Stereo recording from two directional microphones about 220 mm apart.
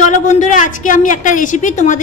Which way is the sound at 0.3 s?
35° left (ahead or behind).